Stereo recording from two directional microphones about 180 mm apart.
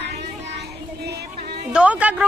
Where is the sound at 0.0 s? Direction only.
70° right (ahead or behind).